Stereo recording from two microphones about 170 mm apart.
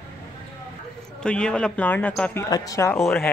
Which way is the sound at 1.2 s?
5° left (ahead or behind).